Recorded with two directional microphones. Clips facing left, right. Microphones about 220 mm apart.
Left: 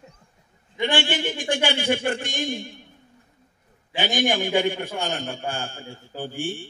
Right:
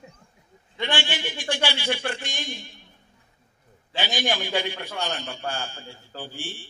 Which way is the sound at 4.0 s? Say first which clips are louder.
Left 4 dB; 50° left (ahead or behind).